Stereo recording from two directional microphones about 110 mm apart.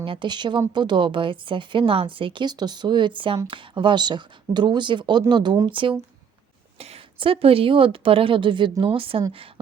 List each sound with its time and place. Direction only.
0.0 s speech: 50° right (ahead or behind)
6.7 s a sound: 70° right (ahead or behind)
7.2 s a woman's voice: 55° right (ahead or behind)